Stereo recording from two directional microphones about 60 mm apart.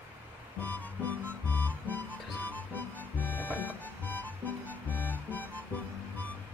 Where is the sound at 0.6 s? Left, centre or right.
Left.